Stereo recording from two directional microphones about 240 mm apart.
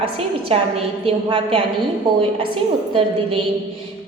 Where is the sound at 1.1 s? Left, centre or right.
Right.